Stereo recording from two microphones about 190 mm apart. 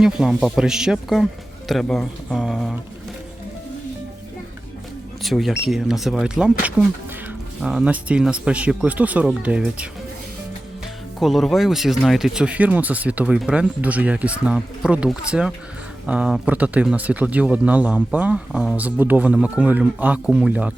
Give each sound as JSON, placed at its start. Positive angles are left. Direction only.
{"t": 0.0, "sound": "speech", "side_deg": 0}
{"t": 5.2, "sound": "speech", "side_deg": 0}
{"t": 11.2, "sound": "speech", "side_deg": 0}